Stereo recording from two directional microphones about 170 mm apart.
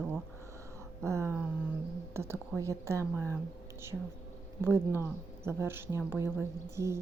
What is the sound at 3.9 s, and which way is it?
Speech, 5° right (ahead or behind).